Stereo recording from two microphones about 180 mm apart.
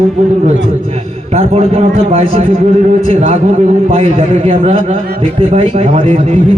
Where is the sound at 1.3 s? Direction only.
35° right (ahead or behind).